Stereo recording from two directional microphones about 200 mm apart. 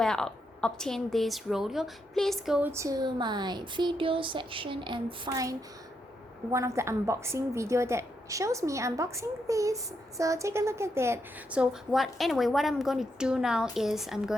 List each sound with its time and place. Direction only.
0.0 s a woman's voice: 5° left (ahead or behind)